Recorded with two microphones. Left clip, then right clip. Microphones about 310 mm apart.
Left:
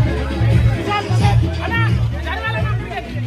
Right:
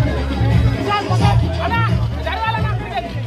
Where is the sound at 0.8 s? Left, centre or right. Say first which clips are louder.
Right 2 dB; right.